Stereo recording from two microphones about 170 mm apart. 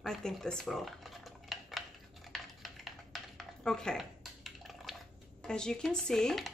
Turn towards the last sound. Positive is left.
turn(degrees=0)  # may be behind; listen again after turning